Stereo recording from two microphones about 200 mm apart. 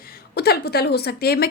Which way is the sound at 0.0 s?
50° left (ahead or behind).